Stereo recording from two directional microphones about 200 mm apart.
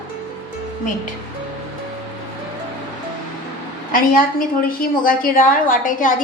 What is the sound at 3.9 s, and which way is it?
A woman's voice, 45° left (ahead or behind).